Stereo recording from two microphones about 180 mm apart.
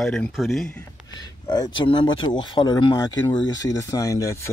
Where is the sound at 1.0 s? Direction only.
20° left (ahead or behind).